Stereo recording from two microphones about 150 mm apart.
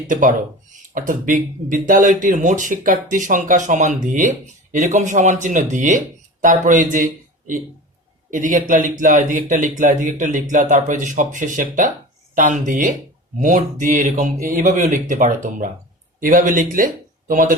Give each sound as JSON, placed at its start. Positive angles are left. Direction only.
{"t": 0.1, "sound": "speech", "side_deg": -60}
{"t": 8.3, "sound": "speech", "side_deg": -60}